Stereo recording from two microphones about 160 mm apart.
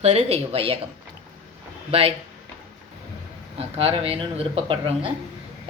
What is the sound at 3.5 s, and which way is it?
Speech, 35° right (ahead or behind).